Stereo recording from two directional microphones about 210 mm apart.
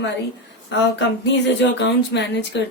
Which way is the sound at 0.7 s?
60° left (ahead or behind).